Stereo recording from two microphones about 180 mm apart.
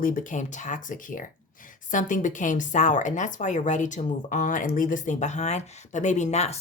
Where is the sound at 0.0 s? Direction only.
50° left (ahead or behind).